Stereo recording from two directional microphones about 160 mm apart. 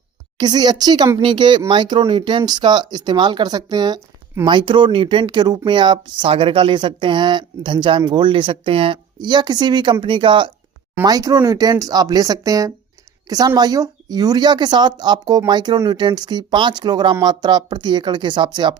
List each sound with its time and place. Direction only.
0.3 s speech: 25° right (ahead or behind)